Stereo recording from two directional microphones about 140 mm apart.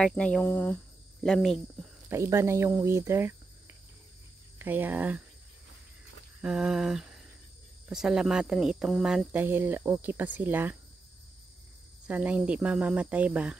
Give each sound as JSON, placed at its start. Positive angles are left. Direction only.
{"t": 0.0, "sound": "speech", "side_deg": 5}
{"t": 1.2, "sound": "a sound", "side_deg": 0}
{"t": 2.0, "sound": "speech", "side_deg": -20}
{"t": 4.6, "sound": "speech", "side_deg": -15}
{"t": 6.4, "sound": "a sound", "side_deg": -5}
{"t": 7.9, "sound": "speech", "side_deg": -5}
{"t": 12.1, "sound": "speech", "side_deg": -10}